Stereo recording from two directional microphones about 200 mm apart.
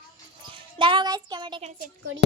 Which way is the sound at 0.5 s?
25° right (ahead or behind).